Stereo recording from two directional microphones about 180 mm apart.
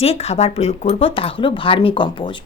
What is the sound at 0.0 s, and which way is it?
Speech, 35° left (ahead or behind).